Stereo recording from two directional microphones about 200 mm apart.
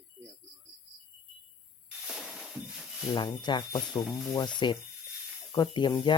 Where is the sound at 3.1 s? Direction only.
20° left (ahead or behind).